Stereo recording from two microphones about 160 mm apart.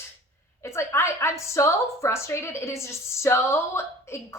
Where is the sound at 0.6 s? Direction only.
15° left (ahead or behind).